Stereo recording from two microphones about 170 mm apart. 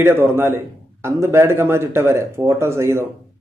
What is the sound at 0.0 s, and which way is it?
Speech, 15° right (ahead or behind).